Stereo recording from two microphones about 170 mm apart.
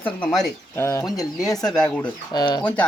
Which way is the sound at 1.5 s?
Centre (ahead or behind).